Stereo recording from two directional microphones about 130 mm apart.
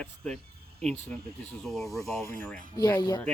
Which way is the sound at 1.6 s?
Centre (ahead or behind).